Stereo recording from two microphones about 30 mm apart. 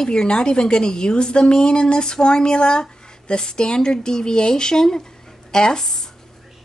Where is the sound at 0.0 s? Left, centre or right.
Left.